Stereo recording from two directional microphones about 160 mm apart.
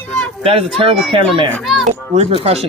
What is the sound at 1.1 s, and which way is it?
Speech, 35° right (ahead or behind).